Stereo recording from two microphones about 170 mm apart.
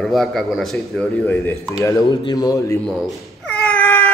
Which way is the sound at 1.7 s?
20° left (ahead or behind).